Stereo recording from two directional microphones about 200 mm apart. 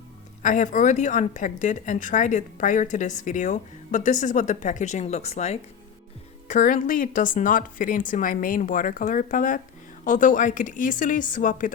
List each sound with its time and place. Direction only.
0.4 s a woman's voice: 40° left (ahead or behind)